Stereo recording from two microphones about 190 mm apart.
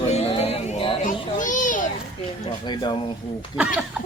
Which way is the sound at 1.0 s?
40° left (ahead or behind).